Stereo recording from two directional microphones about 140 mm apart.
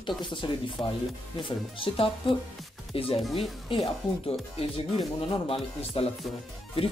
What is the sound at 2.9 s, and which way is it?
Speech, 45° left (ahead or behind).